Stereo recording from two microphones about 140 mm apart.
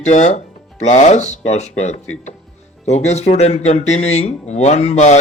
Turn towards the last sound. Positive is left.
turn(degrees=55)  # may be behind; listen again after turning